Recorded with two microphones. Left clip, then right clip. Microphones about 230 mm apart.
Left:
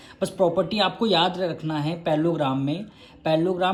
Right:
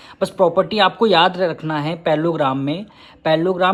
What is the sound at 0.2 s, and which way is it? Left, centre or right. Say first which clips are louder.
Speech: right 6 dB; right.